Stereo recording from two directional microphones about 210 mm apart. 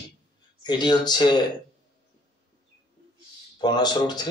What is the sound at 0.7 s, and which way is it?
Speech, 20° left (ahead or behind).